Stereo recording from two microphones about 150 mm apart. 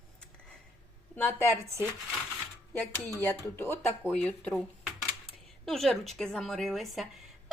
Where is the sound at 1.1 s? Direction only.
15° left (ahead or behind).